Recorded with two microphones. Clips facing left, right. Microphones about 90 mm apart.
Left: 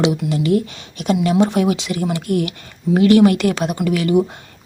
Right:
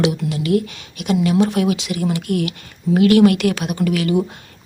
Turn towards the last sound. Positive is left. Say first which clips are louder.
# left 1 dB
turn(degrees=25)  # may be behind; listen again after turning